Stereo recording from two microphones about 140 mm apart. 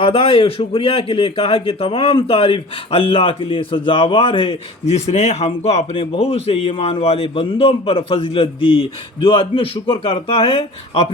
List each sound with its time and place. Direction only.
0.0 s a man's voice: 45° left (ahead or behind)